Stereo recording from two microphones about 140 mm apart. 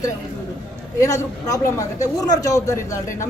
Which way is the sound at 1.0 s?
25° left (ahead or behind).